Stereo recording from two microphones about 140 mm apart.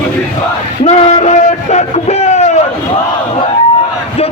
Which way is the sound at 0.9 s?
55° left (ahead or behind).